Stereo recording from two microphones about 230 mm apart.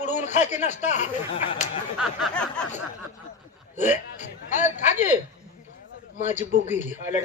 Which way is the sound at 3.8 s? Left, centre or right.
Left.